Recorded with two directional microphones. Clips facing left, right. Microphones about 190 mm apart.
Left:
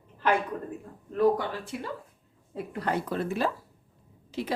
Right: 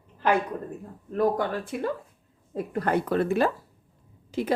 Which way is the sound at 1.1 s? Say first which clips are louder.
Even; 50° right (ahead or behind).